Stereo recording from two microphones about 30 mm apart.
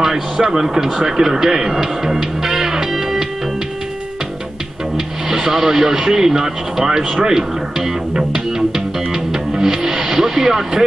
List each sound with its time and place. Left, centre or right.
0.0 s speech: centre
4.9 s speech: centre
7.1 s a man's voice: right
8.1 s music: right